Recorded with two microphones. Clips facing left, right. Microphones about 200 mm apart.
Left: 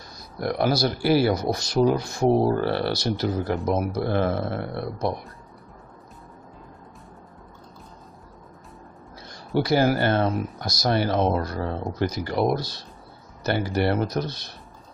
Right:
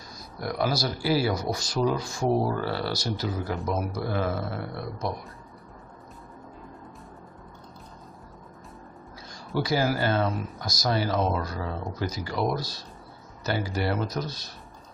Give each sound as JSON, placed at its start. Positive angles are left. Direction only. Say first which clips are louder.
{"t": 0.4, "sound": "speech", "louder": "left 5 dB", "side_deg": 60}
{"t": 9.3, "sound": "speech", "louder": "left 5 dB", "side_deg": 65}